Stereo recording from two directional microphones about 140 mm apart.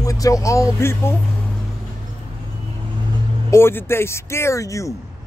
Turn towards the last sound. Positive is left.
turn(degrees=20)  # may be behind; listen again after turning